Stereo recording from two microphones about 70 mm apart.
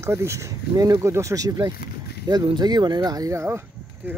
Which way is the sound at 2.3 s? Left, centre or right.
Right.